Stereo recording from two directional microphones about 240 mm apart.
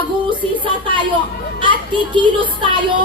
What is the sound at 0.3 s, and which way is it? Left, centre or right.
Music, centre.